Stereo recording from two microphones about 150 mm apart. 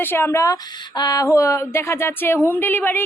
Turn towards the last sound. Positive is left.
turn(degrees=15)  # may be behind; listen again after turning